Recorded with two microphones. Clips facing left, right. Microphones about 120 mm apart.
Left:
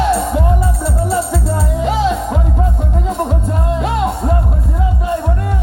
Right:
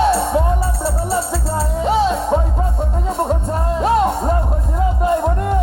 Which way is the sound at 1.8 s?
30° right (ahead or behind).